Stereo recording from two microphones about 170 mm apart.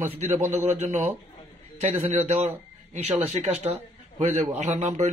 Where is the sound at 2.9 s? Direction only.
40° right (ahead or behind).